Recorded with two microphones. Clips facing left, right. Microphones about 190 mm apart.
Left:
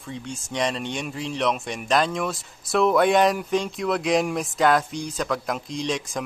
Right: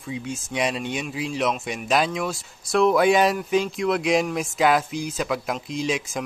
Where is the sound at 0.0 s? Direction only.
5° right (ahead or behind).